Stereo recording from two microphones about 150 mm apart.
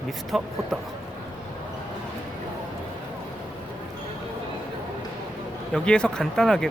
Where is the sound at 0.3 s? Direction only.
Centre (ahead or behind).